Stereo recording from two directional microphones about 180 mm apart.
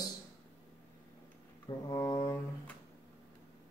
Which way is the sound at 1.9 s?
20° left (ahead or behind).